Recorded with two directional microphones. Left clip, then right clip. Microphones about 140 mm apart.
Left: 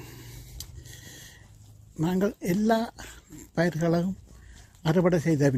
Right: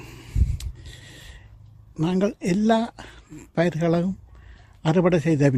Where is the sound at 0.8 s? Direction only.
20° right (ahead or behind).